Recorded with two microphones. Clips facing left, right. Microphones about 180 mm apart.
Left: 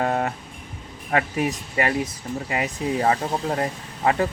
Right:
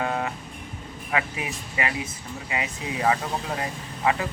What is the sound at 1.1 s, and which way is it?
Speech, 45° left (ahead or behind).